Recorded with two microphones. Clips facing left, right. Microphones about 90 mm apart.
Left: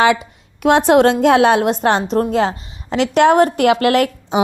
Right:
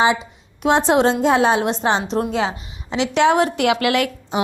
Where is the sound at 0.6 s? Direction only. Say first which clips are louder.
Left 4 dB; 60° left (ahead or behind); by 4.1 s 40° left (ahead or behind).